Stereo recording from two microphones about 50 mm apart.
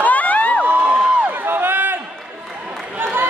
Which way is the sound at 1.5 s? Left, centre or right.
Right.